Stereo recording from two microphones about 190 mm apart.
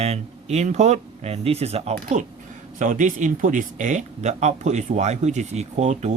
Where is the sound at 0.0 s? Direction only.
35° right (ahead or behind).